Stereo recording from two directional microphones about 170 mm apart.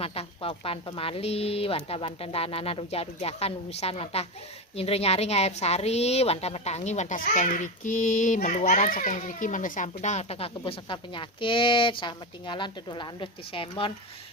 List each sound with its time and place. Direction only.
0.0 s a woman's voice: 35° left (ahead or behind)